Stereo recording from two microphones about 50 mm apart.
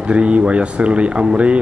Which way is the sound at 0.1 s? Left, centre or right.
Right.